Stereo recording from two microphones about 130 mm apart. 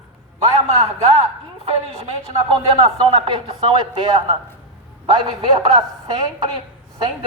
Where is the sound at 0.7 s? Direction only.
55° right (ahead or behind).